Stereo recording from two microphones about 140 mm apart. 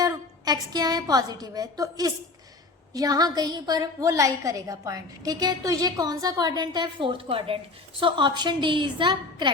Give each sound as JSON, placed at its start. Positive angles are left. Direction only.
{"t": 0.0, "sound": "a woman's voice", "side_deg": -25}